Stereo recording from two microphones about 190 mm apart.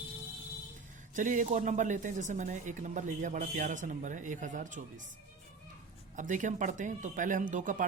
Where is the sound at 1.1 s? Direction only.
45° right (ahead or behind).